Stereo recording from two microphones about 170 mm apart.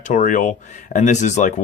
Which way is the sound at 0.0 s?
45° left (ahead or behind).